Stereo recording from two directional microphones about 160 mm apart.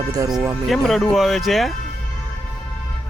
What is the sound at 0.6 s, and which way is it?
Speech, centre (ahead or behind).